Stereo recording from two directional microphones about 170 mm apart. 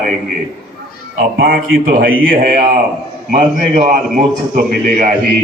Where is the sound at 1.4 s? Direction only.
60° right (ahead or behind).